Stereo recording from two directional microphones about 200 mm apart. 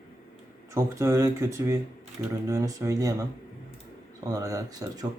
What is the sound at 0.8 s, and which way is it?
Speech, 15° right (ahead or behind).